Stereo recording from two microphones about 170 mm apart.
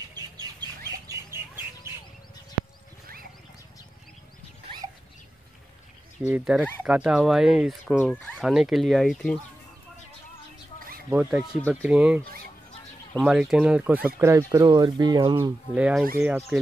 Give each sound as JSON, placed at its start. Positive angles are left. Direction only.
{"t": 1.0, "sound": "chicken", "side_deg": -15}
{"t": 6.2, "sound": "speech", "side_deg": -5}
{"t": 8.0, "sound": "speech", "side_deg": 5}
{"t": 11.1, "sound": "speech", "side_deg": -10}
{"t": 15.7, "sound": "speech", "side_deg": -5}